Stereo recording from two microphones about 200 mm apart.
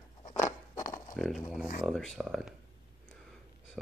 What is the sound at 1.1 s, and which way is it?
Speech, centre (ahead or behind).